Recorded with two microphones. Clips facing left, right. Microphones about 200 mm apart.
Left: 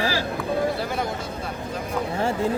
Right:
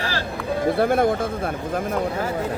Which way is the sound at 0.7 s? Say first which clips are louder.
Right 9 dB; 55° right (ahead or behind).